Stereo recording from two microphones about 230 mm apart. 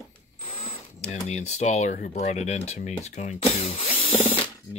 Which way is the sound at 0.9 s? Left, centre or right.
Left.